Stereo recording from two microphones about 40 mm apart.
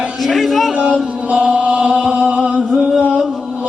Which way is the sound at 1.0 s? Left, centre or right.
Right.